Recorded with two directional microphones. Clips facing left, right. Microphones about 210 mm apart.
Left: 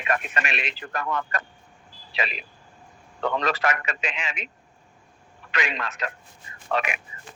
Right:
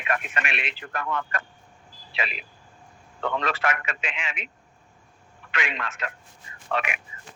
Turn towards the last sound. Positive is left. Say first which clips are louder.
# left 2 dB
turn(degrees=40)  # may be behind; listen again after turning